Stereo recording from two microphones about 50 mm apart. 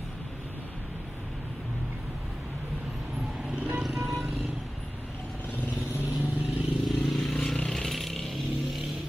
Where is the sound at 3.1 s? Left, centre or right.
Centre.